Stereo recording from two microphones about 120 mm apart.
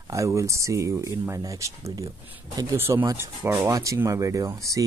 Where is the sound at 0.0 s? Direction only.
25° right (ahead or behind).